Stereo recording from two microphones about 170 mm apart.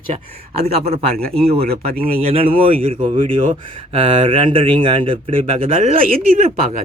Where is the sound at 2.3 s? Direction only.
35° right (ahead or behind).